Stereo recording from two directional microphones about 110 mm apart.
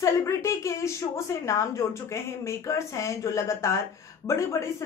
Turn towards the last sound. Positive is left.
turn(degrees=25)  # may be behind; listen again after turning